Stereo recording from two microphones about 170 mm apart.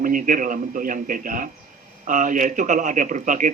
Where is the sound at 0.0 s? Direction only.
50° right (ahead or behind).